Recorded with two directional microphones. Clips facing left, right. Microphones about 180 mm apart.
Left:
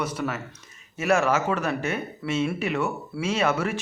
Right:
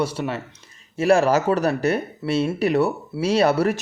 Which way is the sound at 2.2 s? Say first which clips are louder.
Right 5 dB; 25° right (ahead or behind).